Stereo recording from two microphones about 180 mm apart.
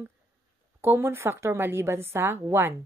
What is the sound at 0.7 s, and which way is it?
A woman's voice, 10° right (ahead or behind).